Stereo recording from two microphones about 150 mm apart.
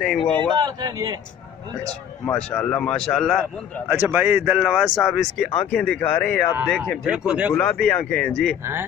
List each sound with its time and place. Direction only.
0.0 s speech: 5° left (ahead or behind)
0.4 s speech: 30° right (ahead or behind)
2.2 s speech: 5° left (ahead or behind)
3.9 s speech: 10° right (ahead or behind); by 6.4 s 5° left (ahead or behind)
7.1 s speech: 5° right (ahead or behind)
7.5 s speech: 5° left (ahead or behind)